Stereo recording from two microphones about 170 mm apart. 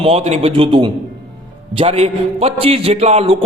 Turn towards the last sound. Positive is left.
turn(degrees=-35)  # may be behind; listen again after turning